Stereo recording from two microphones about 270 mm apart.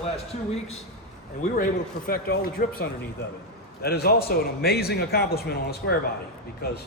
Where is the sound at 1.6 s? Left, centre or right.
Left.